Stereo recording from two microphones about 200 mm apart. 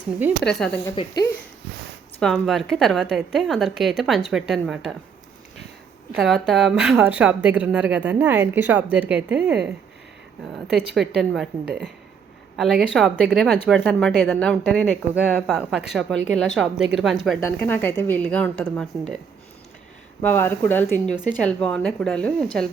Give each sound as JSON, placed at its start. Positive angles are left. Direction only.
{"t": 0.4, "sound": "a woman's voice", "side_deg": 5}
{"t": 0.9, "sound": "speech", "side_deg": 20}
{"t": 2.1, "sound": "a woman's voice", "side_deg": 0}
{"t": 6.1, "sound": "a woman's voice", "side_deg": 0}
{"t": 20.2, "sound": "a woman's voice", "side_deg": 10}